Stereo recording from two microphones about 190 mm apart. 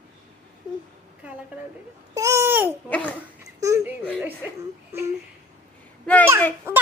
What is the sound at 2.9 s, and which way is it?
Speech, 5° left (ahead or behind).